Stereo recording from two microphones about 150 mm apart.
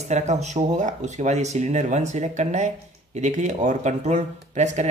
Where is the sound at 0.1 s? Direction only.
50° right (ahead or behind).